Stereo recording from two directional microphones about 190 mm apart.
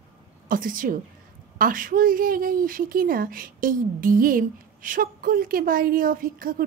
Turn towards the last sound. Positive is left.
turn(degrees=-50)  # may be behind; listen again after turning